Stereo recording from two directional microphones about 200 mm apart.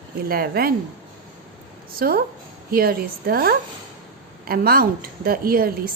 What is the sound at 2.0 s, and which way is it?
A woman's voice, 50° right (ahead or behind).